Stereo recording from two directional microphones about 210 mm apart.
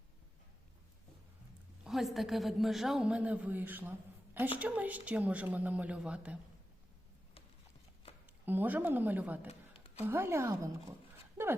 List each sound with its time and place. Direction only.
1.8 s a woman's voice: centre (ahead or behind)
8.4 s speech: 10° right (ahead or behind)
9.5 s a sound: 30° left (ahead or behind)
10.0 s speech: 10° right (ahead or behind)